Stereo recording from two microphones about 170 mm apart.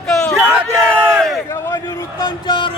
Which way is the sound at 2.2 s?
30° left (ahead or behind).